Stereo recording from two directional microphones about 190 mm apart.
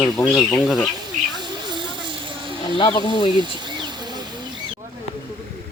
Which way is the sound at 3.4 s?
25° right (ahead or behind).